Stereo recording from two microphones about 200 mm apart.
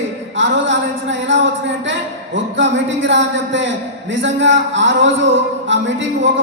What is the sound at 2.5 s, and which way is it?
Speech, 65° right (ahead or behind).